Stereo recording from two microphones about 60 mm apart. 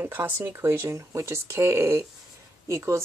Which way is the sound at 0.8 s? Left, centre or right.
Right.